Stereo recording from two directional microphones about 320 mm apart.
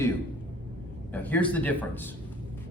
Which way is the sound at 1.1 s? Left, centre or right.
Centre.